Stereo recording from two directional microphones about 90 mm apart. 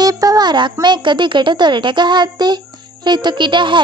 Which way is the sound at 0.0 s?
45° right (ahead or behind).